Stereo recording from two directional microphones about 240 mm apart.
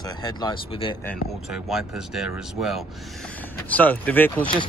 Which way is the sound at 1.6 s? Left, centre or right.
Centre.